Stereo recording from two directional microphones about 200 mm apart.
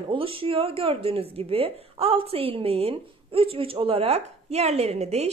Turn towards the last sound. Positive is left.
turn(degrees=-30)  # may be behind; listen again after turning